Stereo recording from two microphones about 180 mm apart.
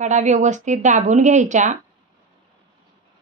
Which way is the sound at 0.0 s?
40° right (ahead or behind).